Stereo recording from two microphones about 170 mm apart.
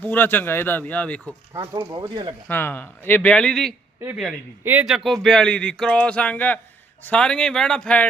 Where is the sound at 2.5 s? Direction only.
10° left (ahead or behind).